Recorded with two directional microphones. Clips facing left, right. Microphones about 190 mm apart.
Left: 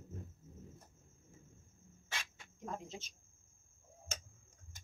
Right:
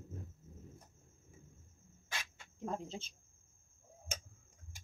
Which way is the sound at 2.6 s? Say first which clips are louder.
Right 4 dB; 30° right (ahead or behind).